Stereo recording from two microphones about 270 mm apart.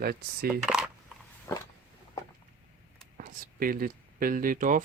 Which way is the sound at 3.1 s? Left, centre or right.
Right.